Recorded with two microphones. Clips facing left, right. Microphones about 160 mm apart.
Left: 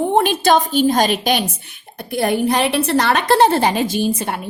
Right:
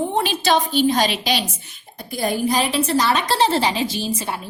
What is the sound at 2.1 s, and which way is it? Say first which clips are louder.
A woman's voice: left 3 dB; 65° left (ahead or behind).